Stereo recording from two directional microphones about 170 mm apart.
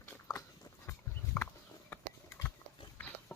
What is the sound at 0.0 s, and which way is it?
Dog, 15° left (ahead or behind).